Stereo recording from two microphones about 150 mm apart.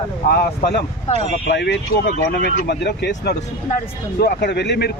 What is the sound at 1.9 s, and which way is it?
Speech, 90° left.